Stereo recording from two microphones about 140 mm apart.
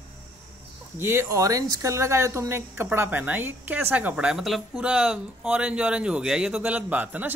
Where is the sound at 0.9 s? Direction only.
15° right (ahead or behind).